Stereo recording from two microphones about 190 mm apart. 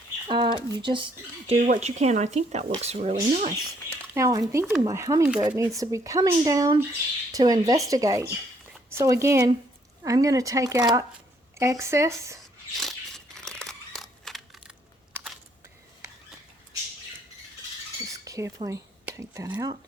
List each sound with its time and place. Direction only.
0.3 s speech: 25° right (ahead or behind)
1.5 s speech: 40° right (ahead or behind)
4.1 s speech: 15° right (ahead or behind)
12.7 s a sound: centre (ahead or behind)
18.1 s speech: 15° right (ahead or behind)